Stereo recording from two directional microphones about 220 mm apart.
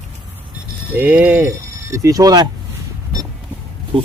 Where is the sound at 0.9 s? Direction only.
5° right (ahead or behind).